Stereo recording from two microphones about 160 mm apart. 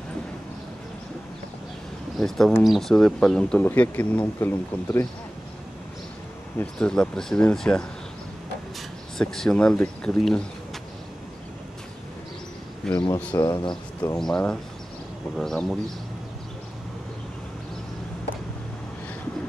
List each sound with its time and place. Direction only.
2.1 s speech: 5° left (ahead or behind)
6.6 s speech: 5° left (ahead or behind)
9.2 s speech: 5° left (ahead or behind)
12.8 s speech: 5° left (ahead or behind)
13.5 s speech: 25° left (ahead or behind)
14.1 s speech: 5° left (ahead or behind)